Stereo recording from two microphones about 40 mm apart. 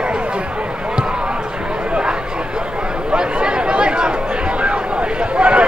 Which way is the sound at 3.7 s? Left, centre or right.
Right.